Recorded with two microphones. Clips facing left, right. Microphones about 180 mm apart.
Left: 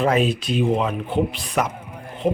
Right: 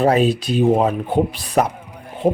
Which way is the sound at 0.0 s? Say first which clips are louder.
Right 4 dB; 35° right (ahead or behind).